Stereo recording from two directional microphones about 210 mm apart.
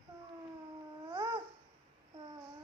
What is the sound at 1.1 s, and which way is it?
Babbling, 20° right (ahead or behind).